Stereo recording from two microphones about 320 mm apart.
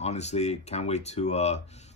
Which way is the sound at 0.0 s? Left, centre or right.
Centre.